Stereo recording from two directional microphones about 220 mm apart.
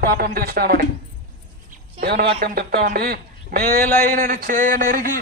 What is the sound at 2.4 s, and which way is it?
A man's voice, 45° right (ahead or behind).